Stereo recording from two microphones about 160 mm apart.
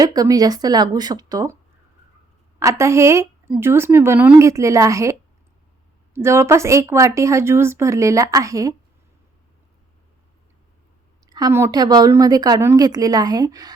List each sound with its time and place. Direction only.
0.0 s a woman's voice: 25° right (ahead or behind)
2.6 s speech: 20° right (ahead or behind)
6.1 s speech: 15° right (ahead or behind)
11.3 s a woman's voice: 25° right (ahead or behind)